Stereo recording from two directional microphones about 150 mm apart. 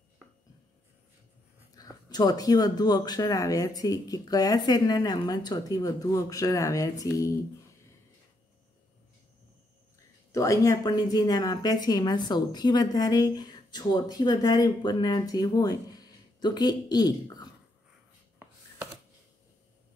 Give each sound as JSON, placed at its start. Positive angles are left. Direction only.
{"t": 1.7, "sound": "speech", "side_deg": 25}
{"t": 10.3, "sound": "speech", "side_deg": 20}